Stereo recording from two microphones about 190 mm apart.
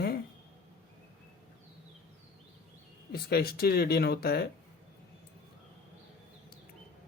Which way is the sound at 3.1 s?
55° left (ahead or behind).